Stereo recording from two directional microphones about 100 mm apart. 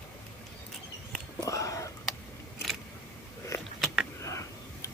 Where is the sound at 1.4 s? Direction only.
35° left (ahead or behind).